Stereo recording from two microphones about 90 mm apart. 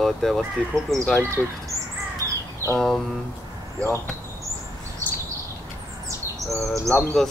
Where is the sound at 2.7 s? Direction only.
5° left (ahead or behind).